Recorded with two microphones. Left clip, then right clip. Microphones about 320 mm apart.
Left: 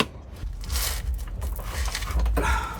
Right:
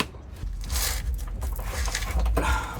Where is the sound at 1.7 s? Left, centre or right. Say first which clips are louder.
Right 1 dB; centre.